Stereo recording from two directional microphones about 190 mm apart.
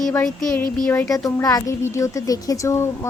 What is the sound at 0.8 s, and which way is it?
A woman's voice, 10° left (ahead or behind).